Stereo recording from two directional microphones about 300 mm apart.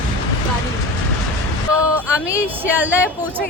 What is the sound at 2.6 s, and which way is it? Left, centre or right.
Speech, centre.